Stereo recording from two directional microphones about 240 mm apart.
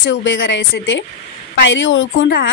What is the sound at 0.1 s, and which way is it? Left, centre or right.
A woman's voice, left.